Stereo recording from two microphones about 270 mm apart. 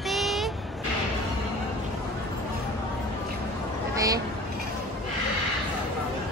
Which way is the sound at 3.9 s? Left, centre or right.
Centre.